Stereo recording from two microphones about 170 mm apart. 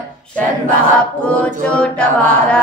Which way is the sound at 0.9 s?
10° left (ahead or behind).